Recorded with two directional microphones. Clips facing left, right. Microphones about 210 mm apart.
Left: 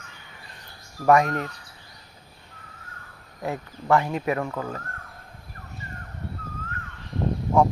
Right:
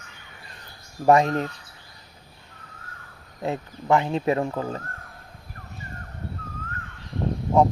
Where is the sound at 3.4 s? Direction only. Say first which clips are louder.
Right 1 dB; 20° right (ahead or behind).